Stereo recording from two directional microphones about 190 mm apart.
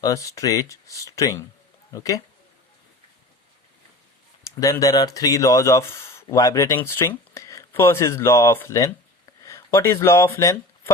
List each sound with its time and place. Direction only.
0.0 s speech: 15° left (ahead or behind)
4.4 s speech: 15° left (ahead or behind)